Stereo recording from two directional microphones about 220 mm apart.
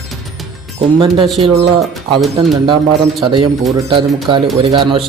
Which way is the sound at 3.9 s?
20° right (ahead or behind).